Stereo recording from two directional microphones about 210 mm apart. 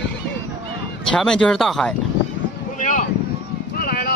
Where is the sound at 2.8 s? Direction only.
35° left (ahead or behind).